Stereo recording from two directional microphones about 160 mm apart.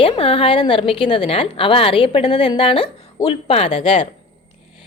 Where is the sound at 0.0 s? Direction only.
35° left (ahead or behind).